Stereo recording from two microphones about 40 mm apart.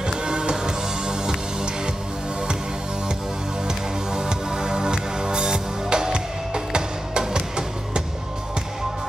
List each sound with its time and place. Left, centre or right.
0.0 s music: right
3.6 s music: centre